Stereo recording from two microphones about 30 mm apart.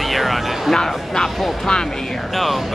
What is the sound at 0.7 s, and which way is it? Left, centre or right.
Speech, centre.